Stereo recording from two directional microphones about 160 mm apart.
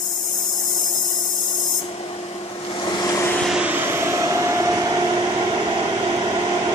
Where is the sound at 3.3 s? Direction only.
5° right (ahead or behind); by 5.1 s 25° right (ahead or behind).